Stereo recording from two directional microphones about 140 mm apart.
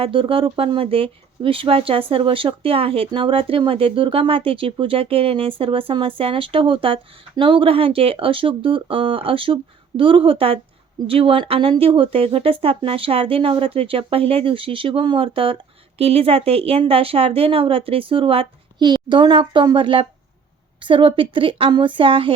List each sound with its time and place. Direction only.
0.0 s speech: 40° right (ahead or behind)